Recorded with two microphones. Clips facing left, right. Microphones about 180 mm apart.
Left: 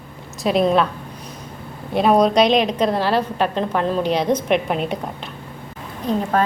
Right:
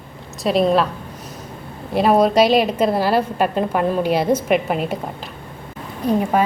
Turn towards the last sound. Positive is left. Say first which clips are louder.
# right 3 dB
turn(degrees=-10)  # may be behind; listen again after turning